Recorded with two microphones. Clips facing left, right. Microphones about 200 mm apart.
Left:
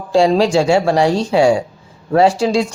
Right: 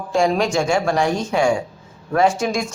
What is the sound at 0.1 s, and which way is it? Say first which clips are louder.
Speech: left 6 dB; 30° left (ahead or behind).